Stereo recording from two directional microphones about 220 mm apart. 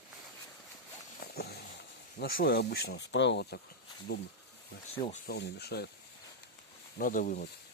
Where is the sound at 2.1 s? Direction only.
40° left (ahead or behind).